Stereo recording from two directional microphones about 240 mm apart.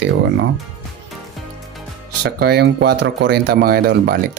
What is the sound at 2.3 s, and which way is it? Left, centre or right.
Speech, right.